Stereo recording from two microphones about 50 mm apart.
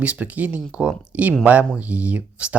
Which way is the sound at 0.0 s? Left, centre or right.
Right.